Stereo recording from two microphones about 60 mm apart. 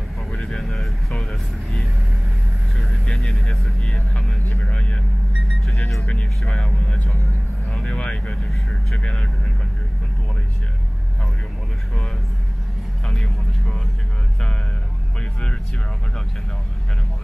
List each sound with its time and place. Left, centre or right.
0.3 s vehicle: centre
3.2 s vehicle: centre
4.6 s vehicle: centre
5.7 s music: centre
6.4 s speech: centre
7.7 s vehicle: centre
9.0 s speech: centre
13.0 s vehicle: centre